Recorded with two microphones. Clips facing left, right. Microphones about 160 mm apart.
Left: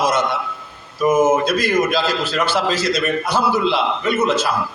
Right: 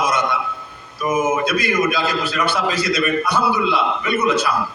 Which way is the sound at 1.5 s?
60° right (ahead or behind).